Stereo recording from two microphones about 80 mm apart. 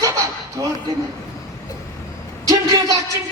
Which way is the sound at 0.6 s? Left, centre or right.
Right.